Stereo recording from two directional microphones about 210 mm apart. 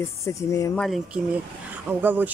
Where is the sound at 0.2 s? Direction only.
15° left (ahead or behind).